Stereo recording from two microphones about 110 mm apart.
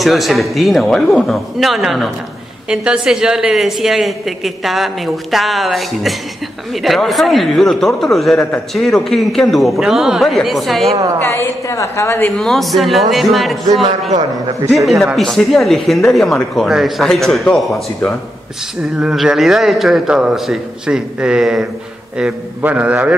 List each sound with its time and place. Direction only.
0.0 s a woman's voice: centre (ahead or behind)
11.1 s a woman's voice: 25° left (ahead or behind)
12.4 s a woman's voice: centre (ahead or behind)
15.1 s a woman's voice: centre (ahead or behind)